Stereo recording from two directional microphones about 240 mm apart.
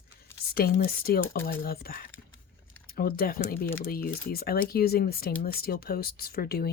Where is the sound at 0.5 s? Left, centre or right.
Left.